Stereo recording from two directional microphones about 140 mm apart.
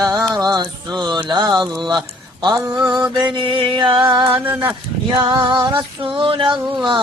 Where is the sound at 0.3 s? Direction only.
30° right (ahead or behind).